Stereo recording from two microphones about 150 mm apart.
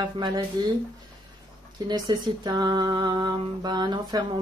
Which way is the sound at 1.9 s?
25° right (ahead or behind).